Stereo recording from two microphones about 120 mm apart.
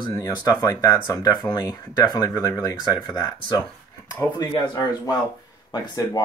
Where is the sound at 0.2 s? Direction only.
30° left (ahead or behind).